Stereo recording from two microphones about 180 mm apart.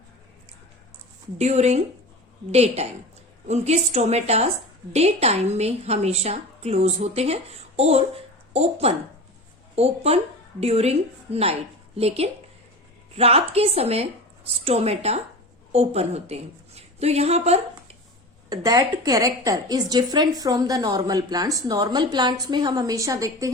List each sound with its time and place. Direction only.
1.4 s a woman's voice: 35° right (ahead or behind)
18.4 s a woman's voice: 20° right (ahead or behind)